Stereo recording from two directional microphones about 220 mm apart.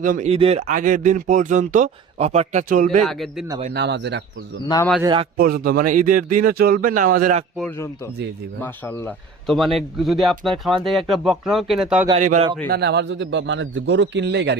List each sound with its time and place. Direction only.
0.0 s speech: 35° right (ahead or behind)
3.0 s speech: centre (ahead or behind)
3.7 s a man's voice: 50° right (ahead or behind)
4.6 s speech: 15° left (ahead or behind)
5.0 s a man's voice: 20° right (ahead or behind)
5.4 s speech: 45° right (ahead or behind)
8.6 s speech: 10° left (ahead or behind)
12.1 s speech: 30° right (ahead or behind)
12.7 s a man's voice: 50° right (ahead or behind)